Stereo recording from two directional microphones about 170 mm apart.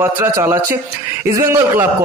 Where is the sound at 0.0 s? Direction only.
15° right (ahead or behind).